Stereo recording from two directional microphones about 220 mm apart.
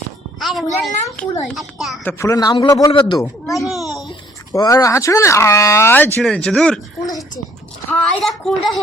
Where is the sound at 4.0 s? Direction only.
20° left (ahead or behind).